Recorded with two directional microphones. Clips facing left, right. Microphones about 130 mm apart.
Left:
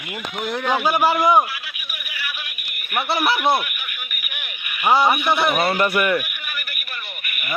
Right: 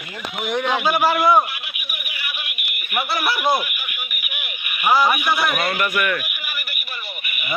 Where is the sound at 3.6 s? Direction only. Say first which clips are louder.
Right 1 dB; 10° right (ahead or behind).